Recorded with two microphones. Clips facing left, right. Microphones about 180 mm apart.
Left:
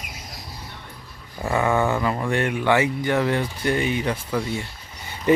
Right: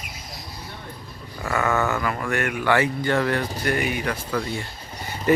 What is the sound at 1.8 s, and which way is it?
Speech, 25° left (ahead or behind).